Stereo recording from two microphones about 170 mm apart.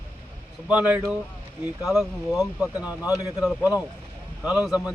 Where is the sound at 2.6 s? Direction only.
20° left (ahead or behind).